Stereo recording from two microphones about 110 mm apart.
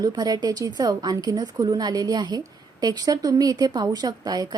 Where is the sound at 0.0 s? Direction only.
35° right (ahead or behind).